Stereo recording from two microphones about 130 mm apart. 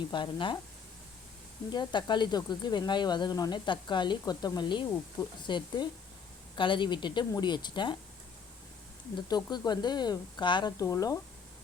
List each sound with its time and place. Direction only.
0.1 s speech: 40° left (ahead or behind)
1.7 s speech: 35° left (ahead or behind)
9.1 s speech: 35° left (ahead or behind)